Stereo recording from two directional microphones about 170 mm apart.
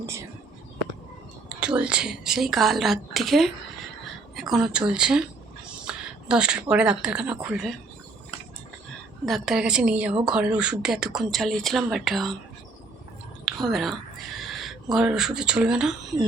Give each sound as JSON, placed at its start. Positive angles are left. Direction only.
{"t": 0.0, "sound": "speech", "side_deg": -15}
{"t": 1.5, "sound": "a woman's voice", "side_deg": -5}
{"t": 9.2, "sound": "a woman's voice", "side_deg": 0}
{"t": 13.4, "sound": "whispering", "side_deg": 0}
{"t": 14.9, "sound": "a woman's voice", "side_deg": -5}